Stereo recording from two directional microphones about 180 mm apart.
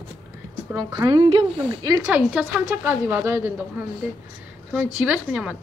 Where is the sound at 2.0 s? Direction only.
5° right (ahead or behind).